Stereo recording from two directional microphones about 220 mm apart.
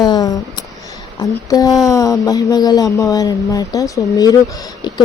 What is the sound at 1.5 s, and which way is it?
Speech, 15° left (ahead or behind).